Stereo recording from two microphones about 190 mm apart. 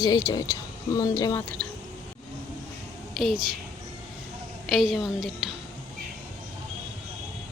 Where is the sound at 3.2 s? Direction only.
Centre (ahead or behind).